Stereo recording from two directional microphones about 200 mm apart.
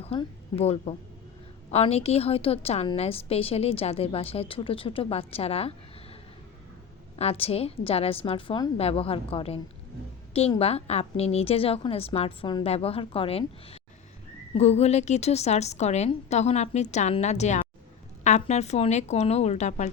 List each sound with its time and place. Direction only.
0.0 s a woman's voice: 30° left (ahead or behind)
7.2 s a woman's voice: 30° left (ahead or behind)
10.6 s a woman's voice: 30° left (ahead or behind)